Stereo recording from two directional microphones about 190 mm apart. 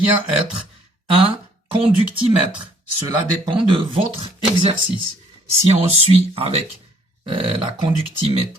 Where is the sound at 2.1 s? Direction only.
25° right (ahead or behind).